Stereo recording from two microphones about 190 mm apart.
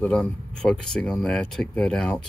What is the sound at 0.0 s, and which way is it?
Speech, 5° left (ahead or behind).